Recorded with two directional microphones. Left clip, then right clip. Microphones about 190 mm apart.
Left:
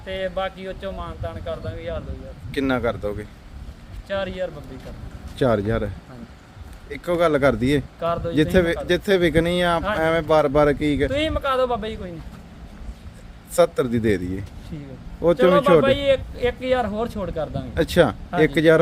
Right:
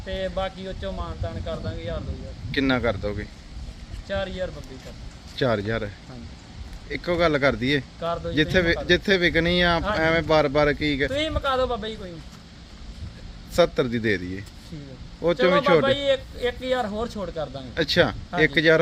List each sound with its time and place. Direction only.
0.0 s speech: centre (ahead or behind)
2.5 s speech: 15° left (ahead or behind)
4.1 s speech: centre (ahead or behind)
5.4 s speech: 15° left (ahead or behind)
6.9 s speech: 15° left (ahead or behind)
8.0 s speech: centre (ahead or behind)
8.5 s speech: 20° left (ahead or behind)
11.1 s speech: centre (ahead or behind)
13.6 s speech: 15° left (ahead or behind)
15.8 s speech: 5° right (ahead or behind)
17.7 s speech: 20° left (ahead or behind)